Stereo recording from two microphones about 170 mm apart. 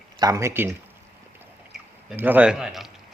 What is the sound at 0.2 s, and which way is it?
Speech, 20° right (ahead or behind).